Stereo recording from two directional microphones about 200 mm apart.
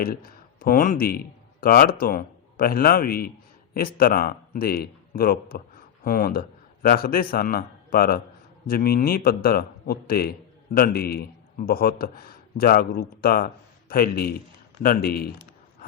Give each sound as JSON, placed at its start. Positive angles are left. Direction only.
{"t": 0.0, "sound": "a man's voice", "side_deg": 45}